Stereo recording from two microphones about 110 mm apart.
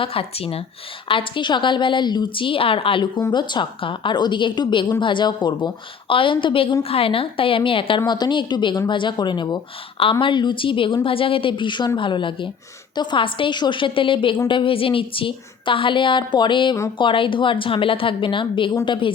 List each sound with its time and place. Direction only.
0.0 s speech: 60° left (ahead or behind)
1.0 s a woman's voice: 50° left (ahead or behind)